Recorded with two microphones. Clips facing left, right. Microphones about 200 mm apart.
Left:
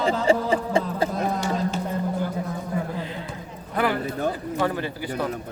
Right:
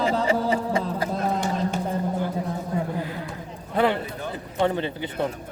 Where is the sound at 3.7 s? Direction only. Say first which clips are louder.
Right 2 dB; 25° right (ahead or behind).